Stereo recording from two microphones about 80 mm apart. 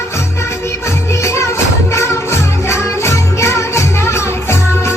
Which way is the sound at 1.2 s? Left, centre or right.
Left.